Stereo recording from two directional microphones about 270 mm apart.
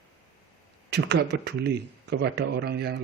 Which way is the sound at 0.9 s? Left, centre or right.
Right.